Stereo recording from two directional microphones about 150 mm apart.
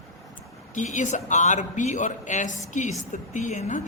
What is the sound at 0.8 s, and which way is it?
A man's voice, 55° left (ahead or behind).